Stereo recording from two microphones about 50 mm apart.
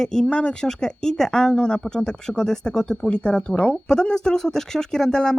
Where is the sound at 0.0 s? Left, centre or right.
Centre.